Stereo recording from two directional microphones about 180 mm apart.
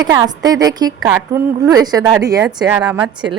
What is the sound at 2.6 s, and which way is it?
Speech, 5° right (ahead or behind).